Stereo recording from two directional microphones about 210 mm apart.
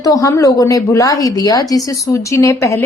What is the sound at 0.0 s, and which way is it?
A woman's voice, 15° left (ahead or behind).